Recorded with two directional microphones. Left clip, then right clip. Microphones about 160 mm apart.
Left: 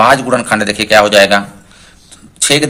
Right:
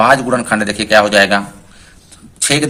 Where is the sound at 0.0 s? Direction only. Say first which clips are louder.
Left 2 dB; 15° left (ahead or behind).